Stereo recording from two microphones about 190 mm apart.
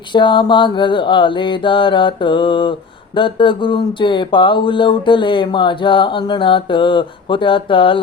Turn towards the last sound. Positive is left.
turn(degrees=25)  # may be behind; listen again after turning